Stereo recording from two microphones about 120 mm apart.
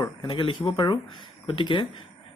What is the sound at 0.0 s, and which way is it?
Speech, 40° left (ahead or behind).